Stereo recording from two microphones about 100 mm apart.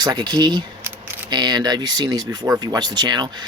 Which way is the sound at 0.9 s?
20° right (ahead or behind).